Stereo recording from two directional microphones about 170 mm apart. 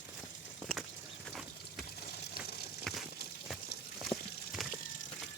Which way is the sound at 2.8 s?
Centre (ahead or behind).